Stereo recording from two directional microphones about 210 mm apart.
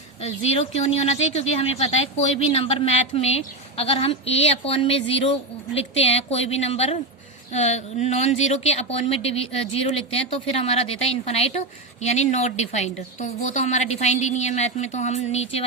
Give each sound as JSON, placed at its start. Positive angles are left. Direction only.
{"t": 0.2, "sound": "a woman's voice", "side_deg": 30}